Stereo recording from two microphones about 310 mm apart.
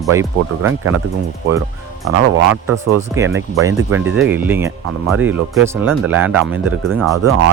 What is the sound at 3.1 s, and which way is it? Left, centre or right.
Speech, centre.